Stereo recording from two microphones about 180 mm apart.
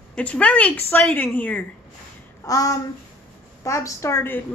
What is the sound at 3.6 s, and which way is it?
Speech, 15° left (ahead or behind).